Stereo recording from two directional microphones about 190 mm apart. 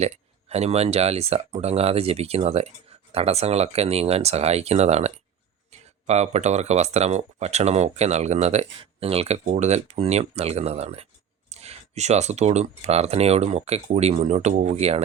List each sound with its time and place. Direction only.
0.0 s speech: 35° right (ahead or behind)